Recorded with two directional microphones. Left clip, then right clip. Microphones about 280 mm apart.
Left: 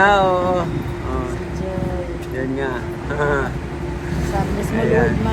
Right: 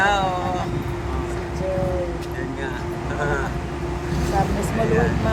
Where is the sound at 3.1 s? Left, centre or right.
Centre.